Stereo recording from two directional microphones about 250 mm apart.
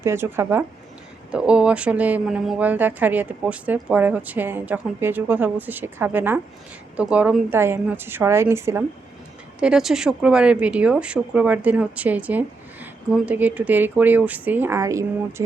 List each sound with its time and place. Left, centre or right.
0.0 s speech: centre